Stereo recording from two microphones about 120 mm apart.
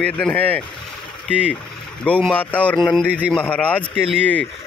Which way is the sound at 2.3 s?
10° left (ahead or behind).